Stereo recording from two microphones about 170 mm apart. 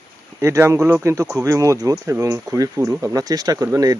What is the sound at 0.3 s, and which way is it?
Speech, 15° right (ahead or behind).